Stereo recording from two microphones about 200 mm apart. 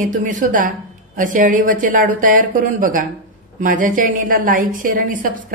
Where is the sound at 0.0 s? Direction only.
40° right (ahead or behind).